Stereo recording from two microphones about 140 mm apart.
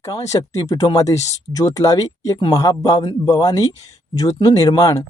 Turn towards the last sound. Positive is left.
turn(degrees=25)  # may be behind; listen again after turning